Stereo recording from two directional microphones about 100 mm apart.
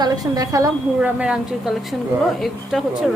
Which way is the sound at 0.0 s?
40° right (ahead or behind).